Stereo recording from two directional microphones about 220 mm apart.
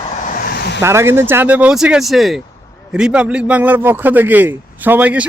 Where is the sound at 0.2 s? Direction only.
40° left (ahead or behind).